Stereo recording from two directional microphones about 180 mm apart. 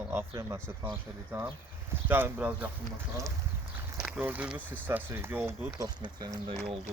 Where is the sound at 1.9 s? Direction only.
10° right (ahead or behind).